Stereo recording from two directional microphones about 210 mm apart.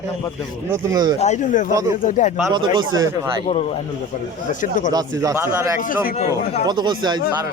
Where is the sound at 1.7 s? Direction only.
15° right (ahead or behind).